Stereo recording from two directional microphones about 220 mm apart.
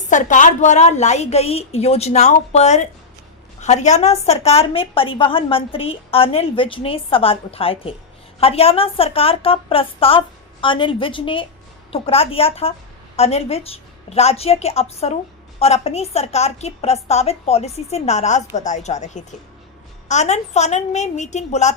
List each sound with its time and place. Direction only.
0.1 s a woman's voice: 35° left (ahead or behind)